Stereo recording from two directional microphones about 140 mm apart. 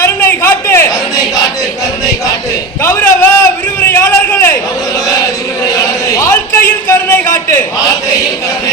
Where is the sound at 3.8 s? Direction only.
15° left (ahead or behind).